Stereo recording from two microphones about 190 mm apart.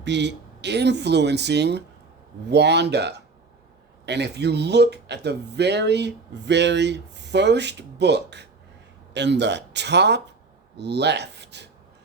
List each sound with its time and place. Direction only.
0.0 s speech: 65° right (ahead or behind)